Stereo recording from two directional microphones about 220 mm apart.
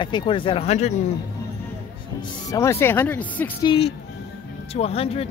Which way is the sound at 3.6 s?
20° left (ahead or behind).